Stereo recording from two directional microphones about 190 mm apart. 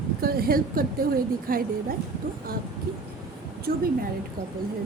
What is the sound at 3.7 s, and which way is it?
Speech, 50° right (ahead or behind).